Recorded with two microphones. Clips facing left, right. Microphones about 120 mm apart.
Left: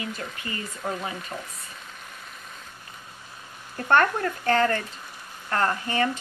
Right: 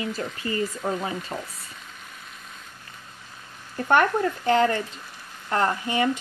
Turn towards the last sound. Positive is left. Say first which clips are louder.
# right 1 dB
turn(degrees=-15)  # may be behind; listen again after turning